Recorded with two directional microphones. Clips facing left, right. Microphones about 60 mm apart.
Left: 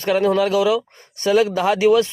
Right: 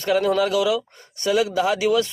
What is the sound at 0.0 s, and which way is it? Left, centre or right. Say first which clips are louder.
A man's voice: left 2 dB; left.